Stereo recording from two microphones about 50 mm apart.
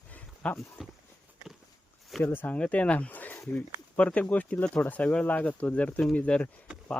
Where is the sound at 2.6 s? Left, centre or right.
Left.